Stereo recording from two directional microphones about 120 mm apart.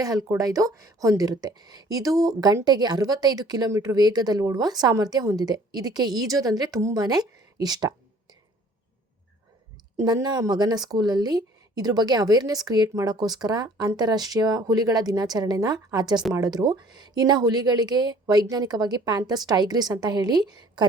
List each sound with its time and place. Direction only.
0.0 s a woman's voice: 30° right (ahead or behind)
10.0 s a woman's voice: 35° right (ahead or behind)